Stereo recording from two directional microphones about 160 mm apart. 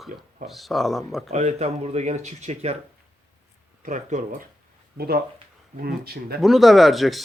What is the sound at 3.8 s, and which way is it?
Speech, 50° right (ahead or behind).